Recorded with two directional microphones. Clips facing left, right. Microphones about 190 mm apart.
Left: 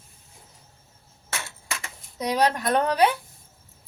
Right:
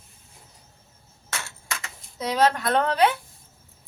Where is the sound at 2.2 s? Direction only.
15° left (ahead or behind).